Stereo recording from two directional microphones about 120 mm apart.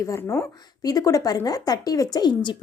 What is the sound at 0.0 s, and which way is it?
A woman's voice, 25° left (ahead or behind).